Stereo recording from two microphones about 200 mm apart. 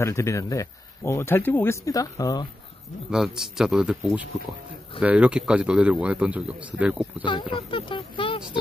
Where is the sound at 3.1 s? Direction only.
Centre (ahead or behind).